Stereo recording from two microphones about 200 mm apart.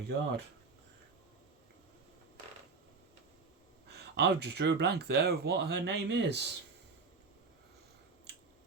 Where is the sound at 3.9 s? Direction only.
55° right (ahead or behind).